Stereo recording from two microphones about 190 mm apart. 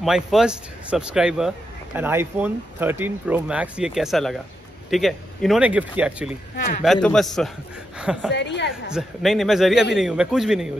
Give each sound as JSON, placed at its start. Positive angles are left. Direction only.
{"t": 0.0, "sound": "speech", "side_deg": 0}
{"t": 6.5, "sound": "a man's voice", "side_deg": 50}
{"t": 6.8, "sound": "speech", "side_deg": 0}
{"t": 8.3, "sound": "a woman's voice", "side_deg": 65}
{"t": 8.9, "sound": "speech", "side_deg": 0}